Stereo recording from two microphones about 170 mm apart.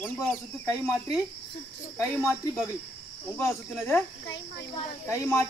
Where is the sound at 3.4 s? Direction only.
15° left (ahead or behind).